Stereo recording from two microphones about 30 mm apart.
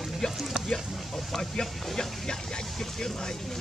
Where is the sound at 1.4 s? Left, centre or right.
Left.